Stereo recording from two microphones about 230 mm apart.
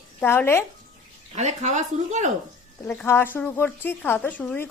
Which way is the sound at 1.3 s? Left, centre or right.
Right.